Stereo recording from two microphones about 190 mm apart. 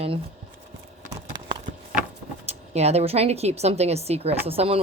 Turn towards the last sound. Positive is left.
turn(degrees=-30)  # may be behind; listen again after turning